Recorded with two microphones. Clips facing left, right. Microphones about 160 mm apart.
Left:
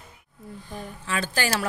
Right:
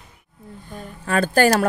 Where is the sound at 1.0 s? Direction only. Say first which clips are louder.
Right 11 dB; 50° right (ahead or behind).